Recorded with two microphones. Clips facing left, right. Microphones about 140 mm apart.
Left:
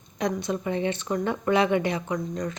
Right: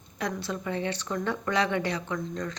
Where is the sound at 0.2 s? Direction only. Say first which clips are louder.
Left 5 dB; 20° left (ahead or behind).